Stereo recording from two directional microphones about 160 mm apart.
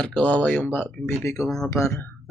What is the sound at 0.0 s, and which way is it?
Speech, 5° left (ahead or behind).